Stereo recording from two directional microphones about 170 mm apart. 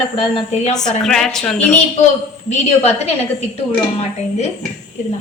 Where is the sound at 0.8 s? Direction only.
5° left (ahead or behind).